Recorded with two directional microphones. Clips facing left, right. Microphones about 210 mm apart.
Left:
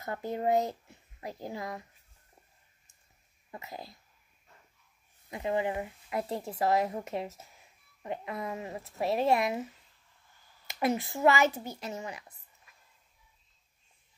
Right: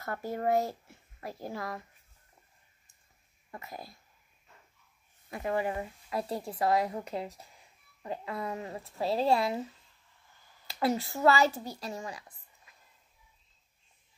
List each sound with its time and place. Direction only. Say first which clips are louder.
0.0 s a child's voice: left 1 dB; 20° left (ahead or behind)
3.5 s speech: left 1 dB; 20° left (ahead or behind)
5.3 s speech: left 1 dB; 20° left (ahead or behind)
10.7 s speech: even; 20° left (ahead or behind)